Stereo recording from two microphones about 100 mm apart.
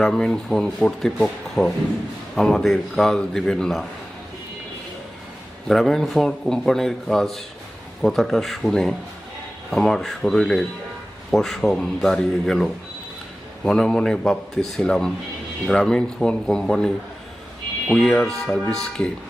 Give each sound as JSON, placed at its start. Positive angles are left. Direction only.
{"t": 0.0, "sound": "a man's voice", "side_deg": 5}
{"t": 5.6, "sound": "a man's voice", "side_deg": 0}